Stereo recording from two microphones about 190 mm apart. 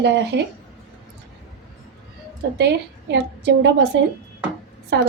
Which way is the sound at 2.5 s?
65° right (ahead or behind).